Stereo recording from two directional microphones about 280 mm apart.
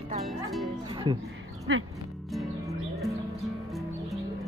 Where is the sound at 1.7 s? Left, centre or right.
Right.